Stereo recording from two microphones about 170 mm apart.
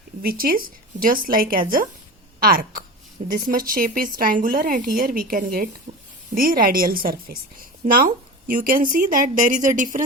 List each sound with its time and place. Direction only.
0.2 s a woman's voice: 60° right (ahead or behind)
3.2 s speech: 40° right (ahead or behind)
3.5 s a woman's voice: 60° right (ahead or behind)